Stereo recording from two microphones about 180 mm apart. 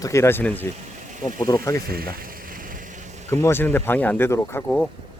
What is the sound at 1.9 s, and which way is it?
Speech, 55° right (ahead or behind).